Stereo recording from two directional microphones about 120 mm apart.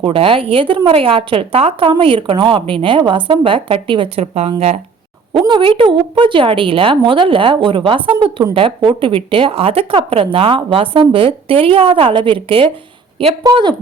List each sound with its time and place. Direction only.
0.0 s a woman's voice: 50° right (ahead or behind)
5.5 s a woman's voice: 45° right (ahead or behind)